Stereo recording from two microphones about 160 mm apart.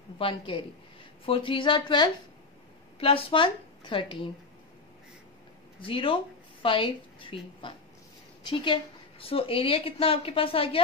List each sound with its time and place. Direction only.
0.2 s a woman's voice: 30° left (ahead or behind)
5.8 s a woman's voice: 35° left (ahead or behind)